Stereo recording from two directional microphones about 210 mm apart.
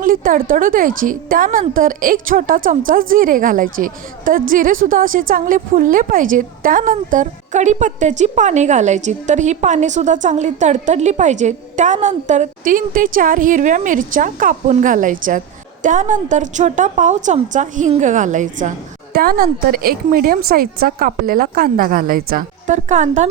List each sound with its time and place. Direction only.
0.0 s a woman's voice: 40° right (ahead or behind)